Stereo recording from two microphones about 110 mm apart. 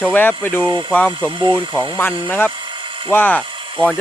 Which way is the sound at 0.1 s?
15° left (ahead or behind).